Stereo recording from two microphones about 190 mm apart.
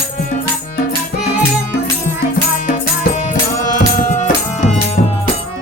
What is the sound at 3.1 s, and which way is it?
Music, 40° left (ahead or behind).